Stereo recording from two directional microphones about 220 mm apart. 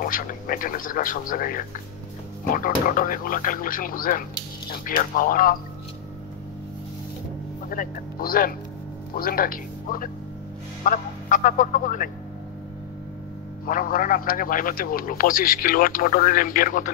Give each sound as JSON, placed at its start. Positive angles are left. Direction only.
{"t": 0.0, "sound": "a man's voice", "side_deg": 40}
{"t": 7.7, "sound": "a man's voice", "side_deg": 40}
{"t": 13.7, "sound": "a man's voice", "side_deg": 40}